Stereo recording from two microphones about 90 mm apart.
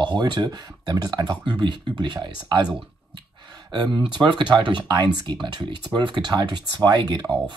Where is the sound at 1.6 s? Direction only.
60° right (ahead or behind).